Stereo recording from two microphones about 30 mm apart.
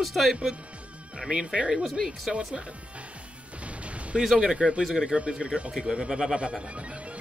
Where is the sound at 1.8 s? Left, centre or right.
Centre.